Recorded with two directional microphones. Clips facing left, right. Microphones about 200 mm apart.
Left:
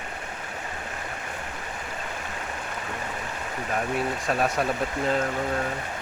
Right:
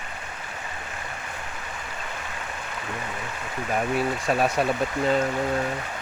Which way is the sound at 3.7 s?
Centre (ahead or behind).